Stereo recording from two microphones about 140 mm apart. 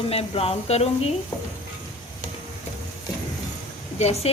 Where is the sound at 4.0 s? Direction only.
50° left (ahead or behind).